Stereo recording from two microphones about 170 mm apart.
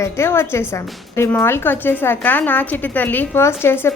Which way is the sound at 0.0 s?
15° left (ahead or behind).